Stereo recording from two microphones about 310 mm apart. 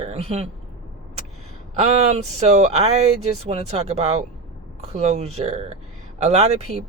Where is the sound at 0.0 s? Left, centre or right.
Centre.